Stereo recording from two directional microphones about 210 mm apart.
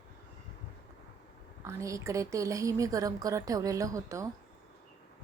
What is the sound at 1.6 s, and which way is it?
A woman's voice, 15° right (ahead or behind).